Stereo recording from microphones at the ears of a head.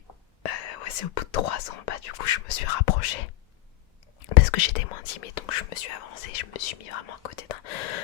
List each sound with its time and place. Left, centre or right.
0.4 s speech: left